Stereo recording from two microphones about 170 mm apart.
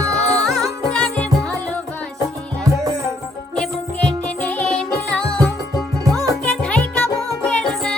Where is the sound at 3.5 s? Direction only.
5° left (ahead or behind).